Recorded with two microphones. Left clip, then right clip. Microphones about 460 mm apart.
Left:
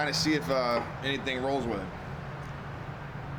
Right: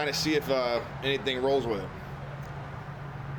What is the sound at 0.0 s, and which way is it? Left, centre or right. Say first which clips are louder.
Speech: even; centre.